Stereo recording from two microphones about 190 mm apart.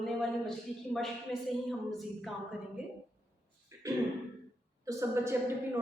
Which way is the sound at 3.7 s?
15° right (ahead or behind).